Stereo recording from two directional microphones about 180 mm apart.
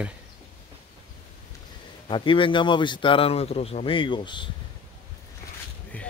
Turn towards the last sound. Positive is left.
turn(degrees=10)  # may be behind; listen again after turning